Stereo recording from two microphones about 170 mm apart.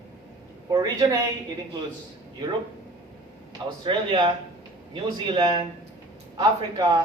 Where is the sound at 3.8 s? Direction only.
30° right (ahead or behind).